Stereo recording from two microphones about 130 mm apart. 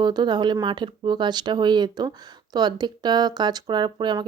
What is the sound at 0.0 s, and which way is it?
Speech, 35° right (ahead or behind).